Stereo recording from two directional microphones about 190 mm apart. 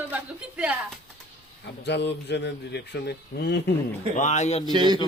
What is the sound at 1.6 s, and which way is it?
A man's voice, 65° left (ahead or behind).